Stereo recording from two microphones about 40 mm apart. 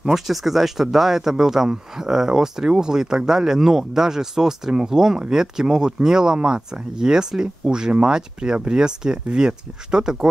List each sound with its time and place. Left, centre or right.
0.0 s speech: centre